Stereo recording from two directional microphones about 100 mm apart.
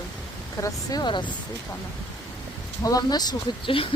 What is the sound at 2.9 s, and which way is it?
Speech, 40° left (ahead or behind).